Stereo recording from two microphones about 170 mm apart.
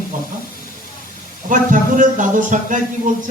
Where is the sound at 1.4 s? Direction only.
50° right (ahead or behind).